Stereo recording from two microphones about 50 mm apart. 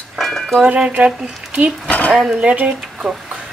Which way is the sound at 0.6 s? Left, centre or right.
Right.